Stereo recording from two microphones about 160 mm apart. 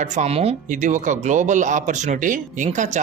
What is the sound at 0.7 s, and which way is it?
Speech, 50° right (ahead or behind).